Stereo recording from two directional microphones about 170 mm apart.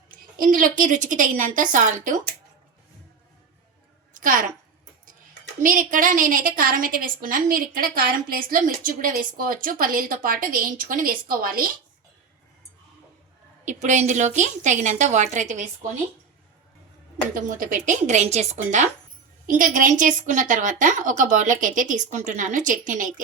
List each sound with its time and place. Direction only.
0.3 s a woman's voice: 55° right (ahead or behind)
4.1 s a sound: 50° right (ahead or behind)
5.9 s a woman's voice: 50° right (ahead or behind)
13.7 s a woman's voice: 45° right (ahead or behind)
17.3 s a woman's voice: 50° right (ahead or behind)